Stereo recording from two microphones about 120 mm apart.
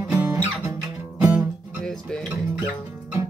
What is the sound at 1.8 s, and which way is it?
Music, 5° left (ahead or behind).